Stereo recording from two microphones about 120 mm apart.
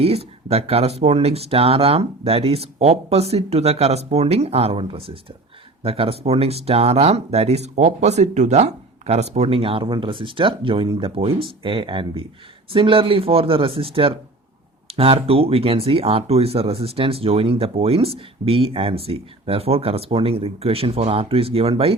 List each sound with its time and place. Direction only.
0.0 s speech: 55° right (ahead or behind)